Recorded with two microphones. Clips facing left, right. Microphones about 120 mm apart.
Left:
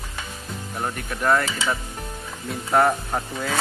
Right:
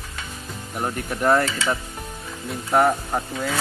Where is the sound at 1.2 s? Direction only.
25° right (ahead or behind).